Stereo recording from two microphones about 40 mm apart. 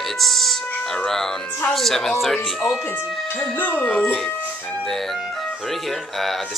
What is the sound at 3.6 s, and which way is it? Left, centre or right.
Speech, left.